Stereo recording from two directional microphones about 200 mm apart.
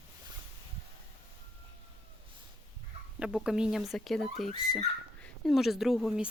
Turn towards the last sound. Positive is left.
turn(degrees=0)  # may be behind; listen again after turning